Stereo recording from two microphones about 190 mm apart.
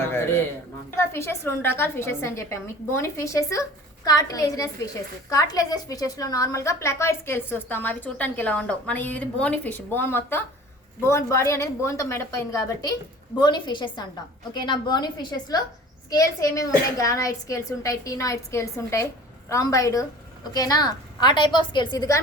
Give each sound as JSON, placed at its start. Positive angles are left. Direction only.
{"t": 0.9, "sound": "a woman's voice", "side_deg": 15}